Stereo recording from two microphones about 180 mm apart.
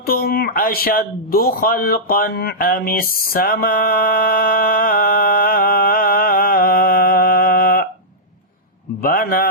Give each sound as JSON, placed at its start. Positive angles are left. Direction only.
{"t": 0.0, "sound": "speech", "side_deg": 55}
{"t": 9.0, "sound": "a man's voice", "side_deg": 55}